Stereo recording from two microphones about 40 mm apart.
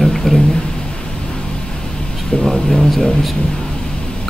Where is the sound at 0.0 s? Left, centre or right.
Centre.